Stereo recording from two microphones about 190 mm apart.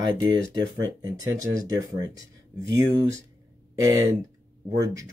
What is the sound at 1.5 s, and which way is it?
Speech, 20° right (ahead or behind).